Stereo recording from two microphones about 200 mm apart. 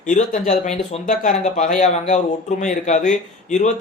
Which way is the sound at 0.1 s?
35° left (ahead or behind).